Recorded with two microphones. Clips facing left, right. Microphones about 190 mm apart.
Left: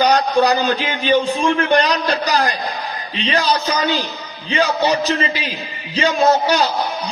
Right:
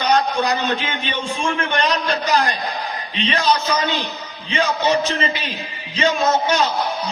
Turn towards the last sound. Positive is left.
turn(degrees=35)  # may be behind; listen again after turning